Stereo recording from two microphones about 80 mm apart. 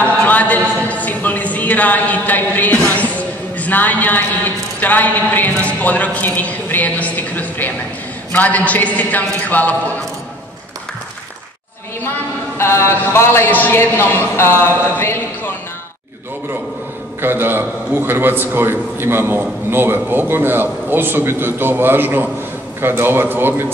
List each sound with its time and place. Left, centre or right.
0.0 s a sound: centre
4.7 s a woman's voice: left
12.5 s a man's voice: left
17.2 s a man's voice: right